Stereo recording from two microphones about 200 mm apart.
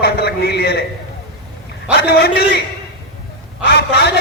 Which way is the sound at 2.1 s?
55° left (ahead or behind).